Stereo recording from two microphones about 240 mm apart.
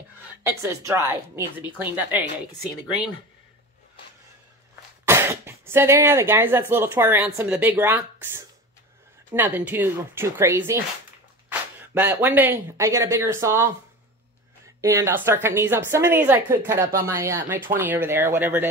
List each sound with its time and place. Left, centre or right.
0.4 s a woman's voice: centre
5.0 s a woman's voice: centre
11.4 s a sound: centre
12.2 s a woman's voice: centre
14.8 s a woman's voice: centre